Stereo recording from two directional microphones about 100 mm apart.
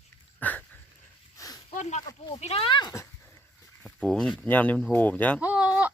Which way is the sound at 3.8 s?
5° left (ahead or behind).